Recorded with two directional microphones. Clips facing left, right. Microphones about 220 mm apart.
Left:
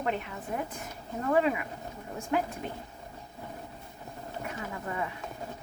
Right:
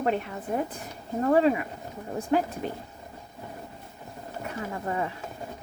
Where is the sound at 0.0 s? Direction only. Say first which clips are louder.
Right 5 dB; 35° right (ahead or behind).